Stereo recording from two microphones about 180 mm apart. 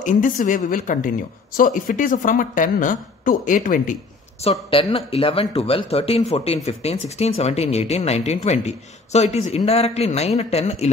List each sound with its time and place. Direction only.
0.0 s a woman's voice: 45° left (ahead or behind)
4.4 s speech: 30° left (ahead or behind)